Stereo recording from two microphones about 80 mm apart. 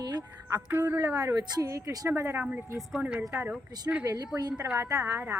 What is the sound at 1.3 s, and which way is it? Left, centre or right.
A woman's voice, right.